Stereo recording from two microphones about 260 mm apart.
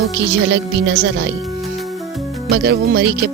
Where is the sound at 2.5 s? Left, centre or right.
Right.